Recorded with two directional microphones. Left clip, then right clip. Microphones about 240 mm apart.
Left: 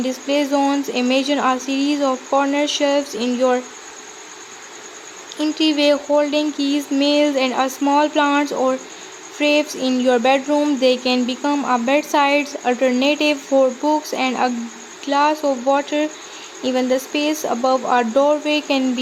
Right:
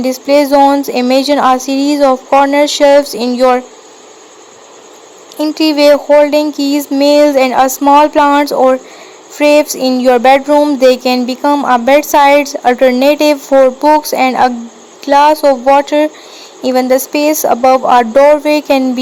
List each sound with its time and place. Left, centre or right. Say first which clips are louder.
0.0 s speech: right 10 dB; right
5.4 s speech: right 8 dB; right